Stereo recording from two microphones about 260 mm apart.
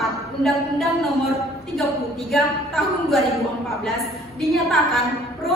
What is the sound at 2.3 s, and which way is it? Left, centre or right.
Speech, centre.